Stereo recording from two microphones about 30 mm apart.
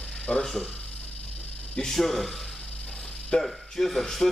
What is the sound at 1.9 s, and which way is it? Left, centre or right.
Speech, centre.